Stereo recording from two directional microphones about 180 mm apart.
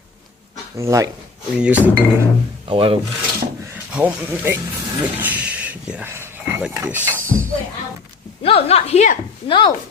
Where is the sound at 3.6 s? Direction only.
10° right (ahead or behind).